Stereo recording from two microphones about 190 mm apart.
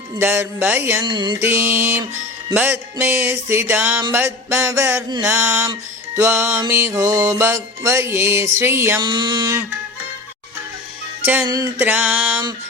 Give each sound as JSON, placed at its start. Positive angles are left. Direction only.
{"t": 0.2, "sound": "music", "side_deg": -10}
{"t": 1.0, "sound": "a sound", "side_deg": -25}
{"t": 1.4, "sound": "music", "side_deg": -10}
{"t": 9.0, "sound": "a sound", "side_deg": -25}
{"t": 11.2, "sound": "speech", "side_deg": -10}
{"t": 11.4, "sound": "music", "side_deg": -15}